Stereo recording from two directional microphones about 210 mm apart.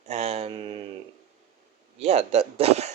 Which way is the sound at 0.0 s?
30° right (ahead or behind).